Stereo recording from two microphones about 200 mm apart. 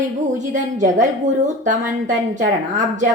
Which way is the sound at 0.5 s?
40° right (ahead or behind).